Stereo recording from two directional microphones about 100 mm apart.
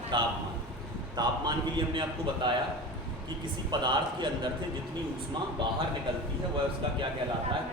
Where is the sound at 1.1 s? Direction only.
45° right (ahead or behind).